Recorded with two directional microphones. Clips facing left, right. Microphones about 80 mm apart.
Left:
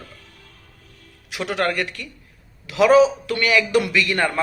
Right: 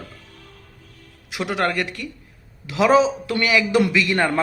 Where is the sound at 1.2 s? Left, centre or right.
Centre.